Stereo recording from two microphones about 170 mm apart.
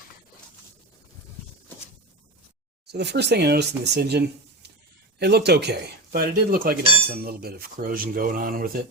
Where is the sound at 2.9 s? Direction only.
80° right.